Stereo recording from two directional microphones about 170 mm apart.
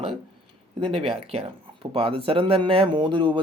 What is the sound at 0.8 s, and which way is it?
Speech, 30° right (ahead or behind).